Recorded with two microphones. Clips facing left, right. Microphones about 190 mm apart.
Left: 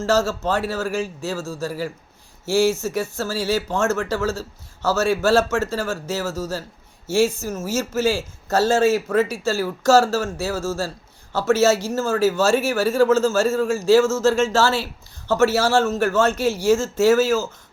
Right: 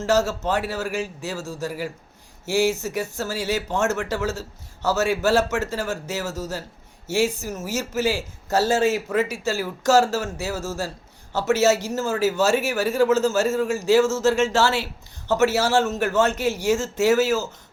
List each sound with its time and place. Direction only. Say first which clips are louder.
0.0 s a man's voice: left 1 dB; 20° right (ahead or behind)